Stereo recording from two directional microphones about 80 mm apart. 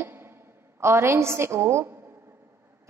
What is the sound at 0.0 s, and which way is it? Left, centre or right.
A woman's voice, right.